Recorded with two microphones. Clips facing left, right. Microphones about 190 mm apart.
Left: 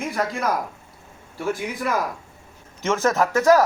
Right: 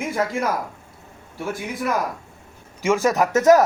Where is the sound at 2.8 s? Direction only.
10° right (ahead or behind).